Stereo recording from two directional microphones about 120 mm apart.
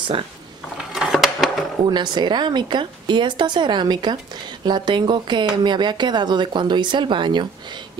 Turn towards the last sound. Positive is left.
turn(degrees=-40)  # may be behind; listen again after turning